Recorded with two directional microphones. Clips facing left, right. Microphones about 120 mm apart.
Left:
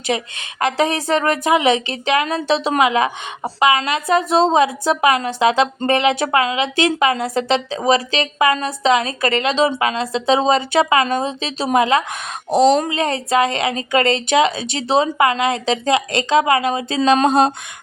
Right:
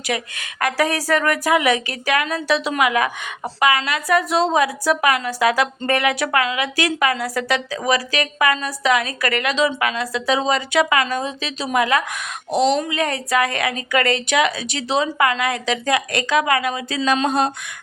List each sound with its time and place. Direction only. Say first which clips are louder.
0.1 s a woman's voice: left 1 dB; 25° left (ahead or behind)
12.5 s speech: left 4 dB; 35° left (ahead or behind)
13.0 s a woman's voice: left 3 dB; 25° left (ahead or behind)